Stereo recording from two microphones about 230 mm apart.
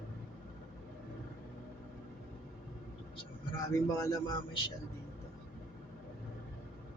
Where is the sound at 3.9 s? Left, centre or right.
Centre.